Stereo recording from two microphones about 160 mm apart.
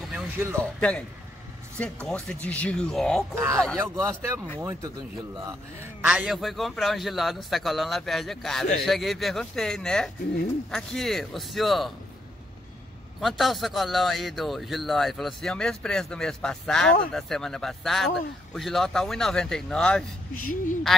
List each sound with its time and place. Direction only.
0.1 s a sound: 15° right (ahead or behind)
0.7 s a man's voice: 5° left (ahead or behind)
3.7 s speech: 15° right (ahead or behind)
6.0 s speech: 5° right (ahead or behind)
13.2 s speech: centre (ahead or behind)
20.3 s a woman's voice: 55° left (ahead or behind)